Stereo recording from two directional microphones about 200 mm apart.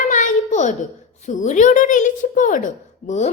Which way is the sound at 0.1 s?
40° left (ahead or behind).